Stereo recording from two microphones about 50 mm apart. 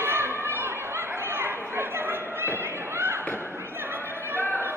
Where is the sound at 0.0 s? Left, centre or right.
Right.